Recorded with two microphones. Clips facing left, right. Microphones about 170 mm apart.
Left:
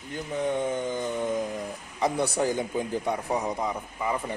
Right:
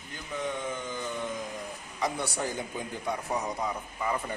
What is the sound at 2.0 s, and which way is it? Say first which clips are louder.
A man's voice: left 6 dB; 30° left (ahead or behind).